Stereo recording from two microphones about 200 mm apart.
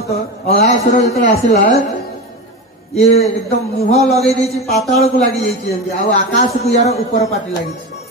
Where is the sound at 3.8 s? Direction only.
30° left (ahead or behind).